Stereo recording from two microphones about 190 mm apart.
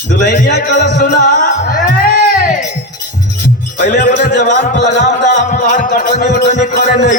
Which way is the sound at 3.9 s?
55° left (ahead or behind).